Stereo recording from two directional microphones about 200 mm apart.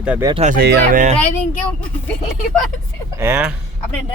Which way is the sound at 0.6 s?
50° right (ahead or behind).